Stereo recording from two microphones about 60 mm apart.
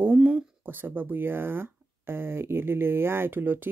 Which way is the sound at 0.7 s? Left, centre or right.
Right.